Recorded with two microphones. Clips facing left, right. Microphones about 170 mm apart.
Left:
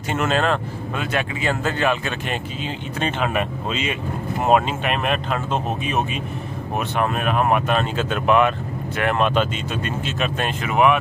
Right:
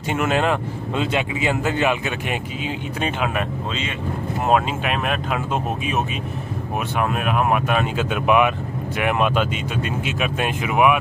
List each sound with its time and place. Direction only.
0.1 s speech: 15° right (ahead or behind)
3.3 s speech: 5° left (ahead or behind); by 11.0 s 10° right (ahead or behind)